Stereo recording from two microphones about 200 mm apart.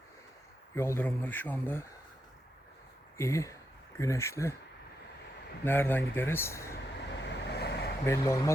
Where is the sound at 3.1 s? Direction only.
15° left (ahead or behind).